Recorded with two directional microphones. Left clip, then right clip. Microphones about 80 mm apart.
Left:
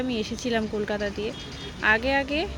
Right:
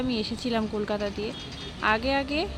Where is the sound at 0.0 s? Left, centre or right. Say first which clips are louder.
Left 1 dB; right.